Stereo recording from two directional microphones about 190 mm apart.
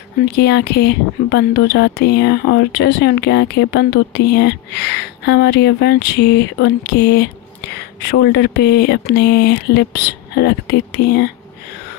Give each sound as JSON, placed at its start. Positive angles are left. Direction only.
{"t": 0.2, "sound": "speech", "side_deg": 60}